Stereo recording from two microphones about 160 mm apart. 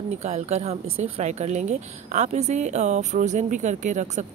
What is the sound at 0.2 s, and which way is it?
Speech, 45° right (ahead or behind).